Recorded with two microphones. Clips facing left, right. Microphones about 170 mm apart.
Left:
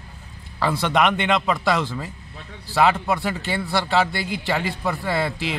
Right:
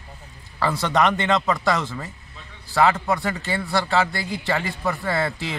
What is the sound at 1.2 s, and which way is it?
Speech, 15° left (ahead or behind).